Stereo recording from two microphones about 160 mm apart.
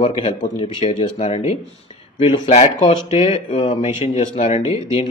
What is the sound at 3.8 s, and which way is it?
Speech, 45° left (ahead or behind).